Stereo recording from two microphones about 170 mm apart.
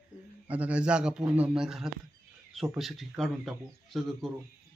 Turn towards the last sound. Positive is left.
turn(degrees=0)  # may be behind; listen again after turning